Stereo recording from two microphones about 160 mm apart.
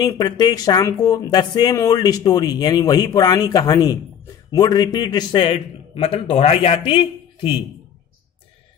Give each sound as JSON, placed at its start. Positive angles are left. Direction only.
{"t": 0.0, "sound": "a man's voice", "side_deg": 25}